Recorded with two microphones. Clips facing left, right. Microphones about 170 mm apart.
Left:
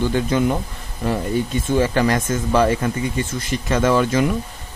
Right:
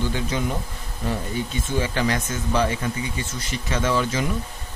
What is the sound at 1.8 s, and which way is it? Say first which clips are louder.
Speech: left 5 dB; 50° left (ahead or behind).